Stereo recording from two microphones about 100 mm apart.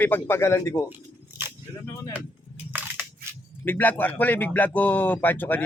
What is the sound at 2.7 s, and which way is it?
Crushing, 15° right (ahead or behind).